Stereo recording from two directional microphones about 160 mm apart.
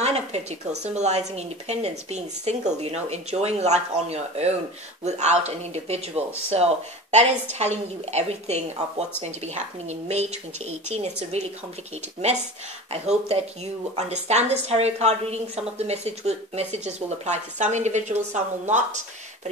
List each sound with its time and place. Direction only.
0.0 s a woman's voice: 40° right (ahead or behind)
12.9 s speech: 40° right (ahead or behind)